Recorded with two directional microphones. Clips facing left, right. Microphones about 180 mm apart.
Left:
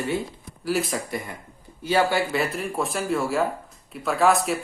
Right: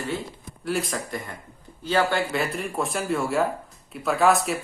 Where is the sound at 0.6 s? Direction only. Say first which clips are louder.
Left 2 dB; centre (ahead or behind).